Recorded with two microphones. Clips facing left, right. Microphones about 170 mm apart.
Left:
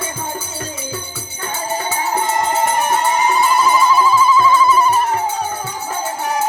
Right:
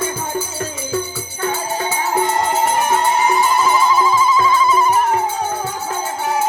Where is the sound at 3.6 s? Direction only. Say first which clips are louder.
Left 1 dB; 15° right (ahead or behind).